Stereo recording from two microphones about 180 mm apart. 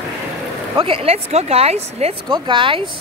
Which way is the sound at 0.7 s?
30° right (ahead or behind).